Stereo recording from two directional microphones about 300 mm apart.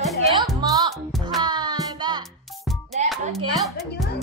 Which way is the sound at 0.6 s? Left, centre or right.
Centre.